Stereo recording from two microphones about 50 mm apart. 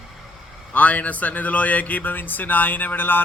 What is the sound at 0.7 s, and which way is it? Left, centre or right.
A man's voice, left.